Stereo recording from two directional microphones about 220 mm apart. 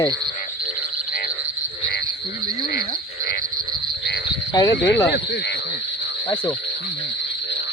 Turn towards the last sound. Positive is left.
turn(degrees=20)  # may be behind; listen again after turning